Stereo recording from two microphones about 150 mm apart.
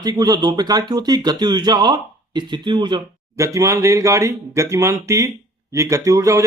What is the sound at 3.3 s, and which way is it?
Speech, 20° right (ahead or behind).